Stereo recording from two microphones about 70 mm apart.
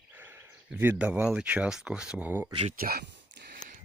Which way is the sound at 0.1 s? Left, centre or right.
Right.